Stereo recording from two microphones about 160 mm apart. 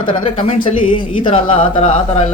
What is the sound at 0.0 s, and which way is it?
Speech, 30° left (ahead or behind).